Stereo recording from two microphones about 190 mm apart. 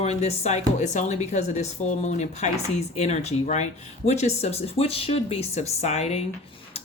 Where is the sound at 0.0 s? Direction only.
35° left (ahead or behind).